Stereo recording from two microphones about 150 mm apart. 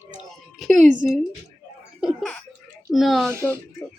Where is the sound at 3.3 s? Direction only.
15° right (ahead or behind).